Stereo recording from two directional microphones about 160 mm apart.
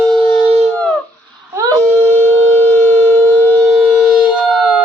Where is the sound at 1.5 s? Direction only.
20° right (ahead or behind).